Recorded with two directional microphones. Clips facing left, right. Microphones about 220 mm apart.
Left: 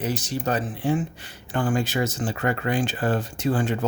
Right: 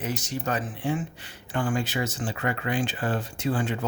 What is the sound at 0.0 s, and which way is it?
Speech, 35° left (ahead or behind).